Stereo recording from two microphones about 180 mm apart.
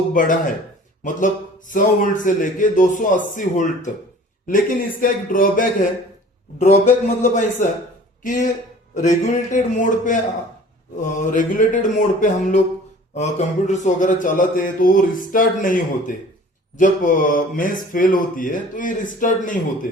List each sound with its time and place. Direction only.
0.1 s a man's voice: 50° left (ahead or behind)